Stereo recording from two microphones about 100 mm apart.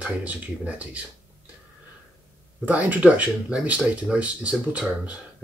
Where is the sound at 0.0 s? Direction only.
15° right (ahead or behind).